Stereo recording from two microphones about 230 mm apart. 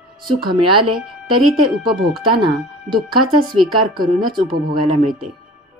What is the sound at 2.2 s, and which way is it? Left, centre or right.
Speech, right.